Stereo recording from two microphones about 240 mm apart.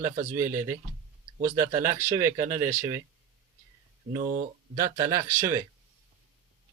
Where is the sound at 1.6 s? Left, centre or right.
Centre.